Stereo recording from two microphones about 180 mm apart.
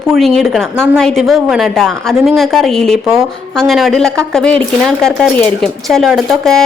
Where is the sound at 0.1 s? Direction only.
Centre (ahead or behind).